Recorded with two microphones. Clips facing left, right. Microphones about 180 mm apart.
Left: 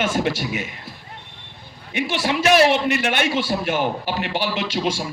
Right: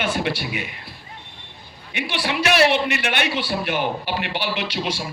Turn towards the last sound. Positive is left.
turn(degrees=45)  # may be behind; listen again after turning